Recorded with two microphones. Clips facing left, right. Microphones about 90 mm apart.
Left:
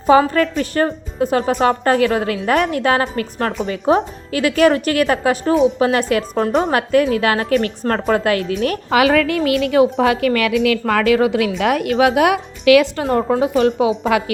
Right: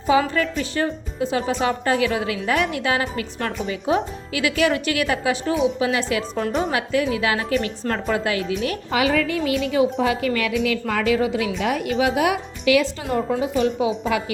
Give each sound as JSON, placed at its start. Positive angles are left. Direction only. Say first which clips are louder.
{"t": 0.1, "sound": "a woman's voice", "louder": "left 6 dB", "side_deg": 45}
{"t": 8.9, "sound": "speech", "louder": "left 6 dB", "side_deg": 75}
{"t": 14.1, "sound": "a woman's voice", "louder": "left 6 dB", "side_deg": 80}